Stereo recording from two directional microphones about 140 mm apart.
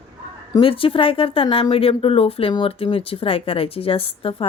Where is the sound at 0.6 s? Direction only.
40° left (ahead or behind).